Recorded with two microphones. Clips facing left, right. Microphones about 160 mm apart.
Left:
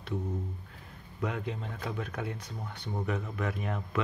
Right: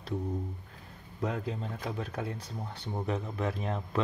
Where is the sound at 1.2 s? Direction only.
35° right (ahead or behind).